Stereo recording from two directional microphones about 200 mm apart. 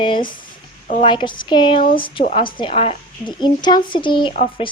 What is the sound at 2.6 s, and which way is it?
A woman's voice, 30° left (ahead or behind).